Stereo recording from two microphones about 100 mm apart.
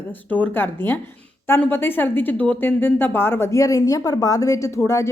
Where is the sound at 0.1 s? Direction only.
15° left (ahead or behind).